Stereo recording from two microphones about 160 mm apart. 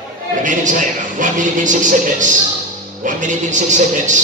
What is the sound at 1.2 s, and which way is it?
Music, 50° right (ahead or behind).